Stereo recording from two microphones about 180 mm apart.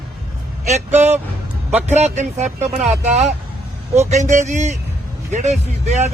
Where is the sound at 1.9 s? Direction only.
40° right (ahead or behind).